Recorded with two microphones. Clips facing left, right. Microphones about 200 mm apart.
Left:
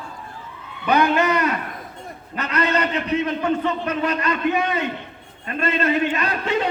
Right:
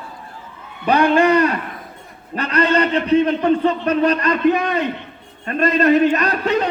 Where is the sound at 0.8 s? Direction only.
35° right (ahead or behind).